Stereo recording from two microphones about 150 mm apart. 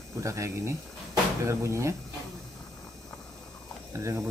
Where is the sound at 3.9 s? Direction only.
20° right (ahead or behind).